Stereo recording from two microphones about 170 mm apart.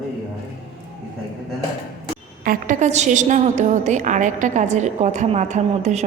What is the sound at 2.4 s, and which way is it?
A woman's voice, 50° right (ahead or behind).